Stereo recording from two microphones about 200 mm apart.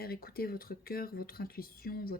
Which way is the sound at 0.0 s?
50° left (ahead or behind).